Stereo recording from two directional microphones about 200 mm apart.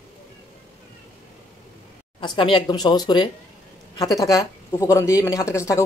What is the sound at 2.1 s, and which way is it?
Speech, 25° left (ahead or behind).